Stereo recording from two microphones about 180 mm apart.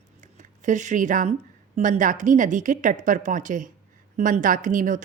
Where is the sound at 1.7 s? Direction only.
40° right (ahead or behind).